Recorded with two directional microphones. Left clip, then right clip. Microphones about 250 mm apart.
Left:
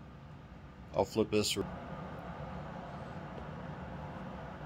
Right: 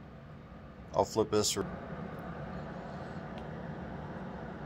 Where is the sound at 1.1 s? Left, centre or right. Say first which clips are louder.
Right 2 dB; centre.